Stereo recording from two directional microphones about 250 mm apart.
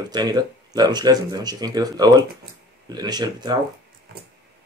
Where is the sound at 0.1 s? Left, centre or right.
Centre.